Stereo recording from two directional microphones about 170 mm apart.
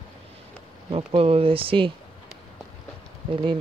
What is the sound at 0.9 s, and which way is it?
Speech, 35° right (ahead or behind).